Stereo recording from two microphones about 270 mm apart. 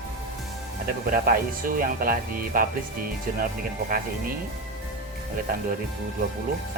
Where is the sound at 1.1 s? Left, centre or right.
Right.